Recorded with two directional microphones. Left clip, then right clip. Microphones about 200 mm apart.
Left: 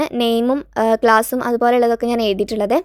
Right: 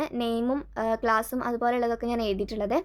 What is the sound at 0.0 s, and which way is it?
A woman's voice, 40° left (ahead or behind).